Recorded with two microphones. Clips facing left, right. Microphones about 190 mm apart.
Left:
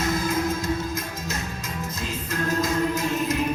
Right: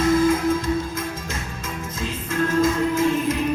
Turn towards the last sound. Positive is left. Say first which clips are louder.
# right 4 dB
turn(degrees=40)  # may be behind; listen again after turning